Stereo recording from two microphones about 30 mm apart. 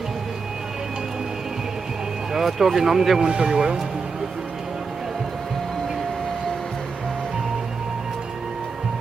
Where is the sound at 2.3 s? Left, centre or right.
Centre.